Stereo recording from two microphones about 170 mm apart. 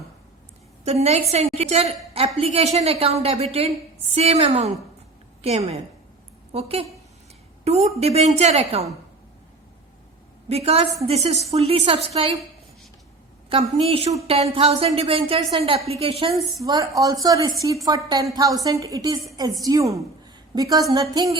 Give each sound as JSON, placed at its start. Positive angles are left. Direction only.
{"t": 0.9, "sound": "a woman's voice", "side_deg": -40}
{"t": 10.5, "sound": "a woman's voice", "side_deg": -35}
{"t": 13.5, "sound": "a woman's voice", "side_deg": -35}
{"t": 16.6, "sound": "speech", "side_deg": -20}